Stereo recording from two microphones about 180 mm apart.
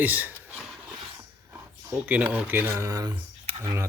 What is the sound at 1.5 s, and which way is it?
Speech, 15° right (ahead or behind).